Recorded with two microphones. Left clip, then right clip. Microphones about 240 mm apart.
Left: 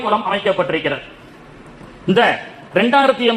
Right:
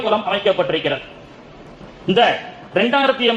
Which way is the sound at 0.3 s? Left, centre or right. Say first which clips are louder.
Even; left.